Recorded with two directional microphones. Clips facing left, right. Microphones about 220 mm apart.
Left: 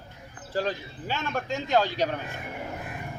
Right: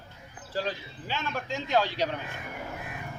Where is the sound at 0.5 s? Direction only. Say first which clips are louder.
Left 3 dB; 50° left (ahead or behind).